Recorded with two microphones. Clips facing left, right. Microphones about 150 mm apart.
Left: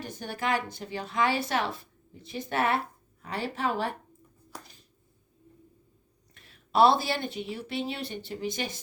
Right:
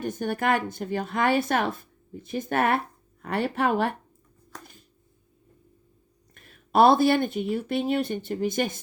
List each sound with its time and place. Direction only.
0.0 s speech: 50° right (ahead or behind)
6.3 s speech: 50° right (ahead or behind)